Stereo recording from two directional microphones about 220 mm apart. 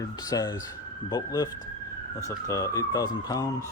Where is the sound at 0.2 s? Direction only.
15° left (ahead or behind).